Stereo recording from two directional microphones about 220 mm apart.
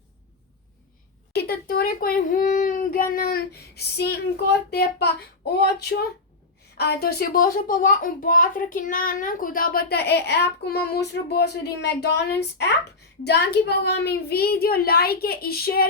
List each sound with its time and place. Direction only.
1.3 s a child's voice: 45° left (ahead or behind)